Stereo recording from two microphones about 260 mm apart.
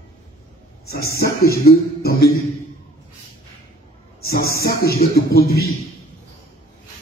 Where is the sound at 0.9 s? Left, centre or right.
Left.